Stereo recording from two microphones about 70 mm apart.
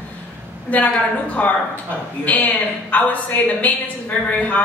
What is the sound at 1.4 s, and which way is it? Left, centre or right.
Speech, left.